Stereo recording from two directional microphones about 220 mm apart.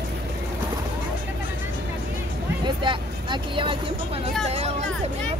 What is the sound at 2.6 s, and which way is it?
Vehicle, 20° right (ahead or behind).